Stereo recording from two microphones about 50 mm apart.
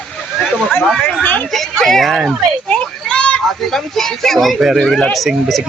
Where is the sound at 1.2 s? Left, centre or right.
Left.